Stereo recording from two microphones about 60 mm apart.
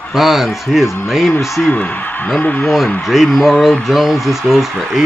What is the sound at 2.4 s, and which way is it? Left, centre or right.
Speech, left.